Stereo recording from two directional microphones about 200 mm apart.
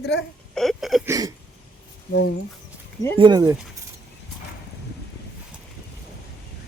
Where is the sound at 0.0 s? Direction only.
55° left (ahead or behind).